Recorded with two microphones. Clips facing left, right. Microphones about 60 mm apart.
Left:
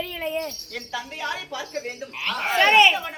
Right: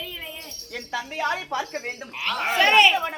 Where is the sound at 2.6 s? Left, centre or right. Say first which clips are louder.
Left 1 dB; centre.